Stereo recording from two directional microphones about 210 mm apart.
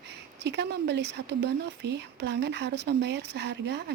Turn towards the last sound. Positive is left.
turn(degrees=-55)  # may be behind; listen again after turning